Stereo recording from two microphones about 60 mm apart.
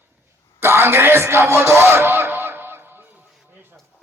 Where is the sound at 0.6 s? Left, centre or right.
Right.